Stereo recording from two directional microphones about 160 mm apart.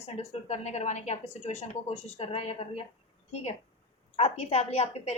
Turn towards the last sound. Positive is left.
turn(degrees=40)  # may be behind; listen again after turning